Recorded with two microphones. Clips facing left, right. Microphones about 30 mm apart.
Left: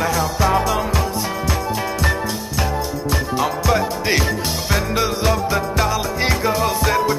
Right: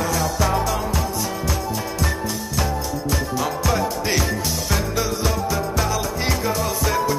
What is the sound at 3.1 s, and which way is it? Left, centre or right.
Music, left.